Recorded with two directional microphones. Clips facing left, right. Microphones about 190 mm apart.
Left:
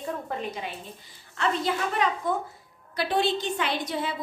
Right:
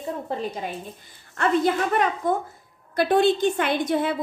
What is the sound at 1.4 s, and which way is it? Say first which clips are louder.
A woman's voice: right 6 dB; 50° right (ahead or behind).